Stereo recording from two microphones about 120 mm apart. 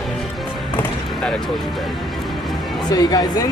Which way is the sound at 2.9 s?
30° left (ahead or behind).